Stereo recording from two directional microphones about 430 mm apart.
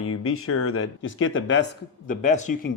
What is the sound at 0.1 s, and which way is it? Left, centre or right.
Speech, left.